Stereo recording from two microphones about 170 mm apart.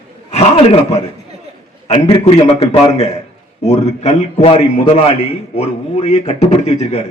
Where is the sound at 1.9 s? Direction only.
35° left (ahead or behind).